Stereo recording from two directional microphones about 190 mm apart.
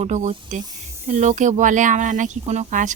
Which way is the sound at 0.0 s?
35° right (ahead or behind).